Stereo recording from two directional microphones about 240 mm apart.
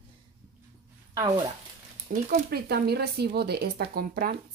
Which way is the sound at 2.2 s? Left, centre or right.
Right.